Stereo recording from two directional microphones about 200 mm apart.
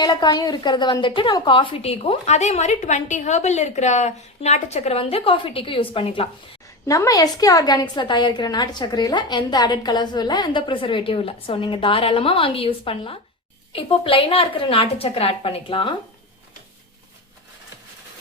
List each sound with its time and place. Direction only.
0.0 s a woman's voice: 20° left (ahead or behind)